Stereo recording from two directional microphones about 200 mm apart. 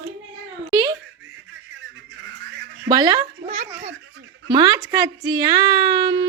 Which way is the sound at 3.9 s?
65° right (ahead or behind).